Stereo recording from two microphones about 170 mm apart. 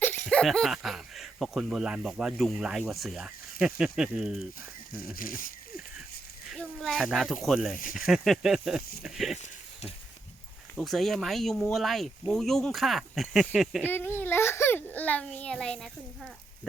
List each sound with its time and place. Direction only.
0.0 s speech: 10° left (ahead or behind)
5.1 s speech: 55° left (ahead or behind)
6.5 s speech: centre (ahead or behind)
10.8 s speech: centre (ahead or behind)
13.8 s a child's voice: 10° left (ahead or behind)